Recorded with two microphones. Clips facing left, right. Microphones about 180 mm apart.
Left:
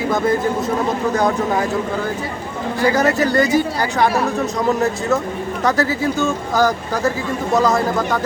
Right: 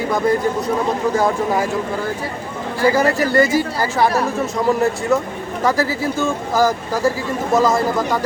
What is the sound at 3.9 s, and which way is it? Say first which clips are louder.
Speech: even; centre (ahead or behind).